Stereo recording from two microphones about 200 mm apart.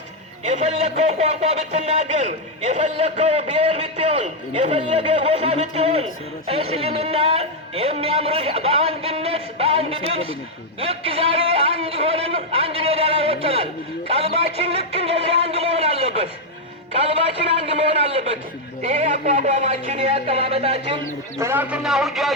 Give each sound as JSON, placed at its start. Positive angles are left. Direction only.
{"t": 0.4, "sound": "a man's voice", "side_deg": -35}
{"t": 17.5, "sound": "a man's voice", "side_deg": -30}
{"t": 21.3, "sound": "a man's voice", "side_deg": -10}